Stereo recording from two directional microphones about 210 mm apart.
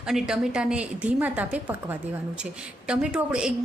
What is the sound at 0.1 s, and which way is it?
A woman's voice, 5° right (ahead or behind).